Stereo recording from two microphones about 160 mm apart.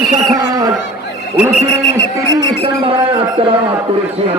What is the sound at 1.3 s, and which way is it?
Speech, 10° right (ahead or behind).